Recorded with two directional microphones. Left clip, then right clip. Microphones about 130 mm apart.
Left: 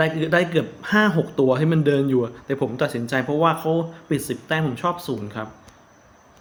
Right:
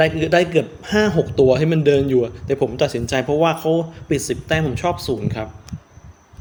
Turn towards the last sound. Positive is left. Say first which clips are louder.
# right 5 dB
turn(degrees=-45)  # may be behind; listen again after turning